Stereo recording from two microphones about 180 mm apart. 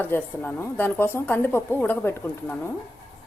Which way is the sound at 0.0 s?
10° left (ahead or behind).